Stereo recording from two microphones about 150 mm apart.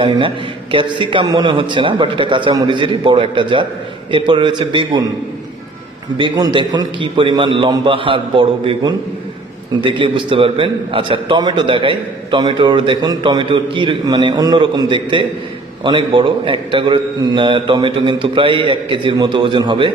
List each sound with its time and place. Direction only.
0.0 s a man's voice: 35° right (ahead or behind)
6.1 s a man's voice: 30° right (ahead or behind)